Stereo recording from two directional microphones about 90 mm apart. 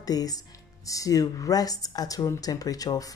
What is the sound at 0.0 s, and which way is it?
Speech, 45° left (ahead or behind).